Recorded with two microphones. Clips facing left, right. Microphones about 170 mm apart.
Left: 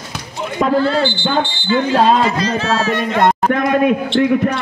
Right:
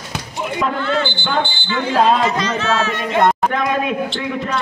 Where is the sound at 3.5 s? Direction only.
55° left (ahead or behind).